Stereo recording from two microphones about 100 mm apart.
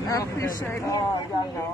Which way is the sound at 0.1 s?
30° left (ahead or behind).